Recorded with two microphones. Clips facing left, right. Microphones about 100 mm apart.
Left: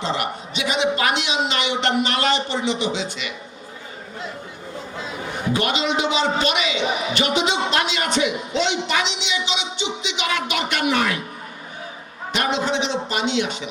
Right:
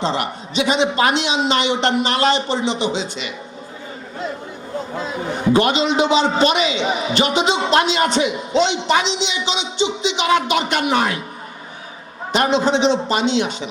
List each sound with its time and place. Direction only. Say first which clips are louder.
0.0 s a man's voice: right 3 dB; 30° right (ahead or behind)
5.5 s a man's voice: right 5 dB; 30° right (ahead or behind)
12.3 s a man's voice: right 6 dB; 30° right (ahead or behind)